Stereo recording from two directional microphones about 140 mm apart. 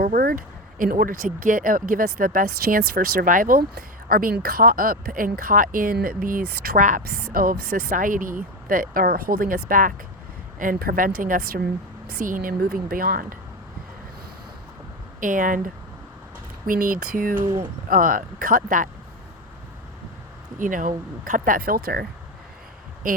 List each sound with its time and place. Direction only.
0.0 s speech: 90° right
15.2 s speech: 70° right (ahead or behind)
17.4 s speech: 30° right (ahead or behind)
17.8 s speech: 80° right
20.6 s speech: 70° right (ahead or behind); by 22.0 s 90° right
23.1 s speech: 75° right (ahead or behind)